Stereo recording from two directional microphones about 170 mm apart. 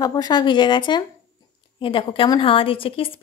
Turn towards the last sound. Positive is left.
turn(degrees=30)  # may be behind; listen again after turning